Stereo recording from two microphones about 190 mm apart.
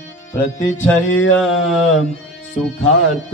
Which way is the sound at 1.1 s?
90° left.